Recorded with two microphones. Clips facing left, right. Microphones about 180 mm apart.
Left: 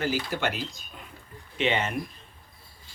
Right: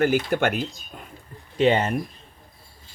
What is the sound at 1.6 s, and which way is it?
Speech, 40° right (ahead or behind).